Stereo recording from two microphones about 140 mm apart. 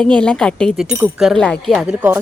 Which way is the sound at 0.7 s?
5° right (ahead or behind).